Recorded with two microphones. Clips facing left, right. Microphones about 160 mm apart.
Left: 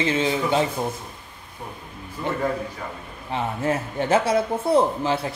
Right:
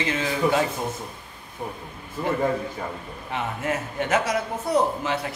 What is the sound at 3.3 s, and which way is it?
A man's voice, 30° left (ahead or behind).